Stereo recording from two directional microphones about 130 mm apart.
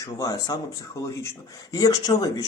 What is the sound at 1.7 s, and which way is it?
Speech, 30° left (ahead or behind).